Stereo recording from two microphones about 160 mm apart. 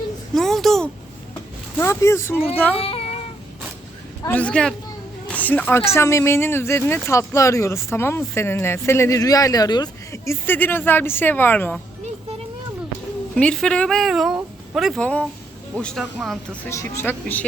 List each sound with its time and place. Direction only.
0.3 s a sound: centre (ahead or behind)
1.8 s speech: 20° left (ahead or behind)
2.8 s child singing: 40° left (ahead or behind)
4.3 s speech: 10° left (ahead or behind)
13.3 s speech: 5° left (ahead or behind)
15.0 s a woman's voice: 10° left (ahead or behind)
16.6 s speech: 15° left (ahead or behind)